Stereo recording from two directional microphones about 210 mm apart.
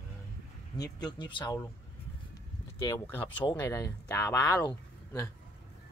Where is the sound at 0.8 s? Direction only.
20° left (ahead or behind).